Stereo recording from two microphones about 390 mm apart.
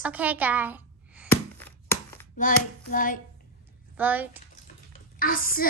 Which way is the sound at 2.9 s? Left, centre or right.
Left.